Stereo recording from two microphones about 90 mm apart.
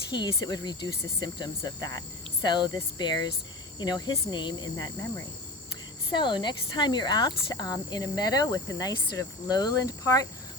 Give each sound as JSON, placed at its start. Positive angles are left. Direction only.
{"t": 0.1, "sound": "speech", "side_deg": 50}
{"t": 6.1, "sound": "speech", "side_deg": 60}